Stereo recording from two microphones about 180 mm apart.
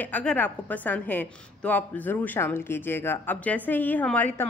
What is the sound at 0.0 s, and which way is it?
A woman's voice, 5° left (ahead or behind).